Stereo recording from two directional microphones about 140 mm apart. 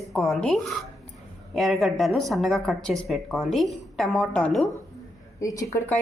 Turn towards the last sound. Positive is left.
turn(degrees=25)  # may be behind; listen again after turning